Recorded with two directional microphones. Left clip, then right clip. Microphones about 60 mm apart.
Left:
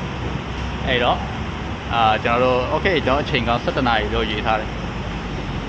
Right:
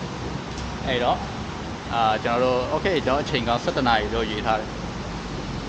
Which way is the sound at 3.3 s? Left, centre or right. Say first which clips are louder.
Left 3 dB; right.